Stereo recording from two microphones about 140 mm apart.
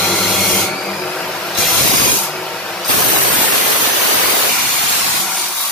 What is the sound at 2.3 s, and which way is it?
Spray, 5° left (ahead or behind).